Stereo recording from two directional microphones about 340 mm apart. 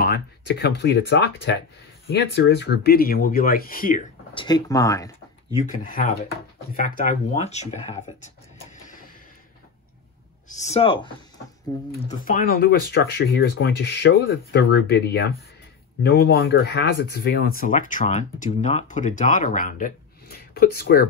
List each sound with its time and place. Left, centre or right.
0.0 s speech: left; by 5.1 s centre
5.6 s speech: left
8.8 s a sound: left
10.5 s speech: centre